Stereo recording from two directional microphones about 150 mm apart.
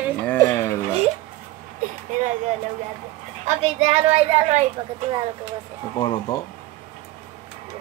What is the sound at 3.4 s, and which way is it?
A child's voice, 45° right (ahead or behind).